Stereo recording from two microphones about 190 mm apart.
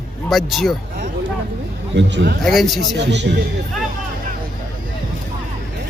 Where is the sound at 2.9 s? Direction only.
70° right (ahead or behind).